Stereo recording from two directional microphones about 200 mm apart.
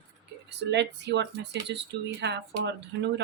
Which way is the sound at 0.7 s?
60° right (ahead or behind).